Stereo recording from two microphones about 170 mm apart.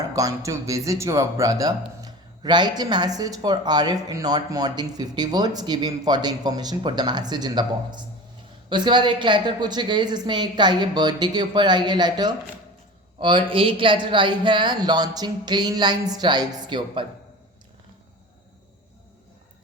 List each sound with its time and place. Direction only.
0.1 s speech: 20° right (ahead or behind)